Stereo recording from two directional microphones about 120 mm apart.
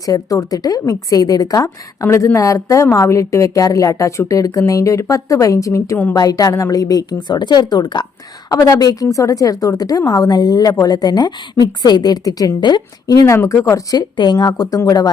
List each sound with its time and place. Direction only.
0.0 s a woman's voice: 30° left (ahead or behind)
13.2 s a woman's voice: 25° left (ahead or behind)
14.2 s a woman's voice: 35° left (ahead or behind)